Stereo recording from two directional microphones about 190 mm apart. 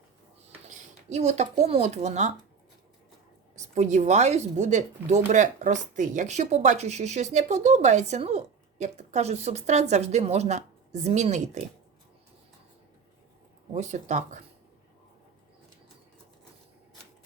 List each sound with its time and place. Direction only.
0.7 s speech: 35° right (ahead or behind)
3.8 s speech: 35° right (ahead or behind)
13.7 s speech: 35° right (ahead or behind)